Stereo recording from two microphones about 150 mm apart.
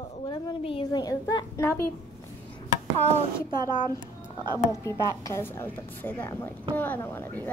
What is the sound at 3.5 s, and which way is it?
Speech, 25° right (ahead or behind).